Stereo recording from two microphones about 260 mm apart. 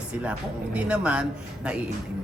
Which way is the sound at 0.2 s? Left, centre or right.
Centre.